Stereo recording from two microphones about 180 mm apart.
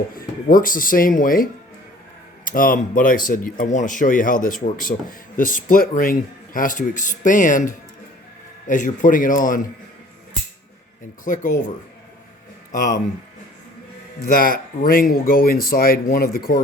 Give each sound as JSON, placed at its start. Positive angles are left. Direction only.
{"t": 0.2, "sound": "speech", "side_deg": 50}
{"t": 12.7, "sound": "speech", "side_deg": 50}
{"t": 14.2, "sound": "speech", "side_deg": 55}